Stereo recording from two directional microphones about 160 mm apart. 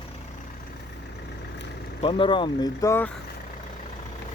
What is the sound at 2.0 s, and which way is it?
Speech, 30° left (ahead or behind).